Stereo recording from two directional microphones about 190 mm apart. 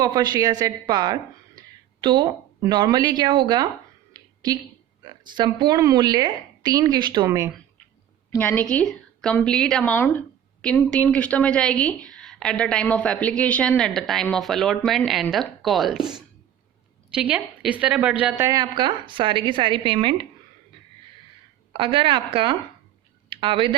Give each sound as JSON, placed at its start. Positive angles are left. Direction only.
{"t": 0.0, "sound": "a woman's voice", "side_deg": -20}
{"t": 1.6, "sound": "a sound", "side_deg": -20}
{"t": 2.0, "sound": "a woman's voice", "side_deg": -25}
{"t": 4.1, "sound": "a sound", "side_deg": -20}
{"t": 5.0, "sound": "a woman's voice", "side_deg": -25}
{"t": 8.3, "sound": "a woman's voice", "side_deg": 10}
{"t": 21.7, "sound": "a woman's voice", "side_deg": -25}